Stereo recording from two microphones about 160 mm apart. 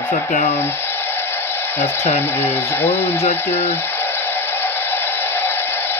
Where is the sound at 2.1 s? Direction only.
15° left (ahead or behind).